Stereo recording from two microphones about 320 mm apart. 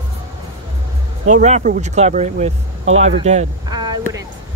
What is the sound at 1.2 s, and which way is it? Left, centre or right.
Speech, right.